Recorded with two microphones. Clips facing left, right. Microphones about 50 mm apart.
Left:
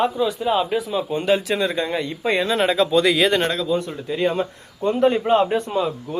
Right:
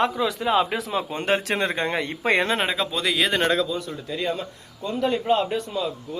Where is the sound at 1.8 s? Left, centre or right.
Right.